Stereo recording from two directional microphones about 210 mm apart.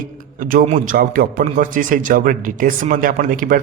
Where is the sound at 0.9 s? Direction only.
40° right (ahead or behind).